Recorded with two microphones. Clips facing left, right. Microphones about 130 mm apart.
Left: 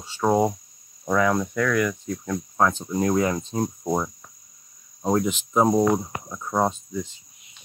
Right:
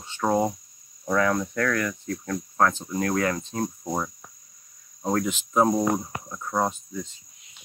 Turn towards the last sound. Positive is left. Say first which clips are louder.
# left 3 dB
turn(degrees=20)  # may be behind; listen again after turning